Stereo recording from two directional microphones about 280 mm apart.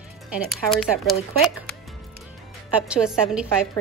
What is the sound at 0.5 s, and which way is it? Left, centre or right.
A woman's voice, centre.